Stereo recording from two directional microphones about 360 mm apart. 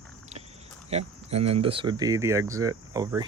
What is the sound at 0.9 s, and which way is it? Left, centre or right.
Speech, centre.